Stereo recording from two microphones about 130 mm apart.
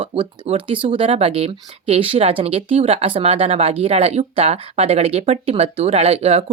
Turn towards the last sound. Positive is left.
turn(degrees=-50)  # may be behind; listen again after turning